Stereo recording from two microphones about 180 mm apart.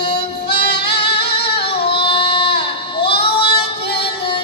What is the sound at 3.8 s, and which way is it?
Music, 65° left (ahead or behind).